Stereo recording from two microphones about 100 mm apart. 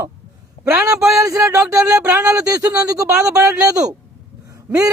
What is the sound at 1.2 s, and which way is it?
Speech, 30° right (ahead or behind).